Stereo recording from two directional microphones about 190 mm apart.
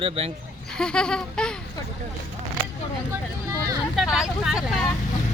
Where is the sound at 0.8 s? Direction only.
5° left (ahead or behind).